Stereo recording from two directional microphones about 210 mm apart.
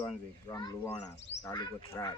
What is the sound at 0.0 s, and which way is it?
Speech, 15° left (ahead or behind).